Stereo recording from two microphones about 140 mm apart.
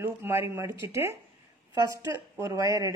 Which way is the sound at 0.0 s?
20° right (ahead or behind).